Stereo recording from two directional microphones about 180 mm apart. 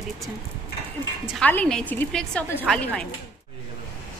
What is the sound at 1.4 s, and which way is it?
A woman's voice, 5° left (ahead or behind).